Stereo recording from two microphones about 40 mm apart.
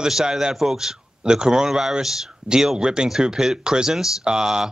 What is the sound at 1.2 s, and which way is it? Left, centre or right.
Speech, right.